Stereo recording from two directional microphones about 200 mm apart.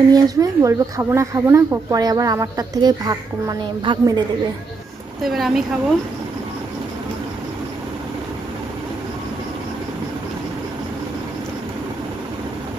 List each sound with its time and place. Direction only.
0.1 s speech: 15° right (ahead or behind)
5.2 s speech: centre (ahead or behind)